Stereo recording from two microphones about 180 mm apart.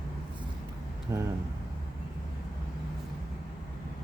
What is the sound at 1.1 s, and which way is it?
Speech, 20° right (ahead or behind).